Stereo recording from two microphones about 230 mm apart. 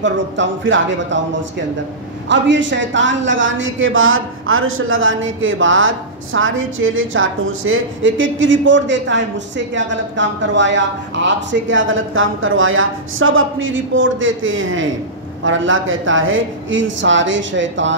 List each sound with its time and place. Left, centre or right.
0.0 s speech: right
2.2 s a man's voice: right